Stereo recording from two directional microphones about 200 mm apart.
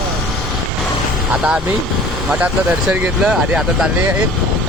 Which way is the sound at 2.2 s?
5° right (ahead or behind).